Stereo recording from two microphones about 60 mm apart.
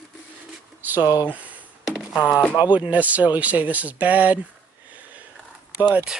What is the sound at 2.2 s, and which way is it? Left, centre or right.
Speech, left.